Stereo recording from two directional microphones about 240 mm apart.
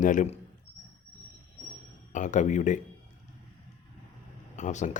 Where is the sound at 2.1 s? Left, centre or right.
Left.